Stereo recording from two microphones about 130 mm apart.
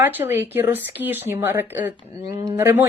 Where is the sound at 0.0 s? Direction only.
15° right (ahead or behind).